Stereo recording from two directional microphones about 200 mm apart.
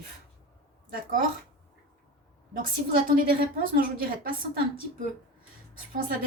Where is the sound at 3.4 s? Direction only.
45° right (ahead or behind).